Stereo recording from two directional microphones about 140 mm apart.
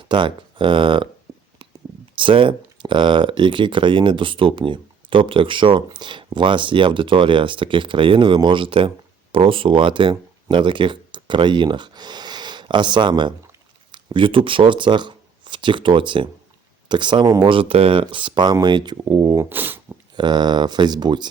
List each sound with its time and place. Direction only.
0.1 s speech: 35° right (ahead or behind)
2.1 s speech: 35° right (ahead or behind)
19.4 s speech: 15° right (ahead or behind)
20.1 s speech: 30° right (ahead or behind)